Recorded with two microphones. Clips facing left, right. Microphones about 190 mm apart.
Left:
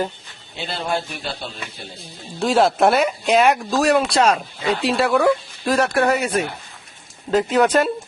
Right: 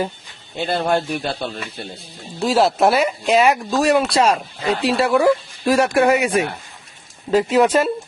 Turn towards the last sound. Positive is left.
turn(degrees=0)  # may be behind; listen again after turning